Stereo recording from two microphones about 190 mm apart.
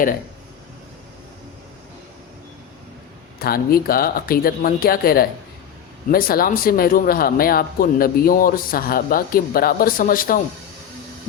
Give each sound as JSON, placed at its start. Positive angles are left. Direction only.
{"t": 3.3, "sound": "speech", "side_deg": 50}